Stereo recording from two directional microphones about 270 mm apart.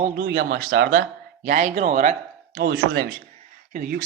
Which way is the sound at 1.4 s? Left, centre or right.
Right.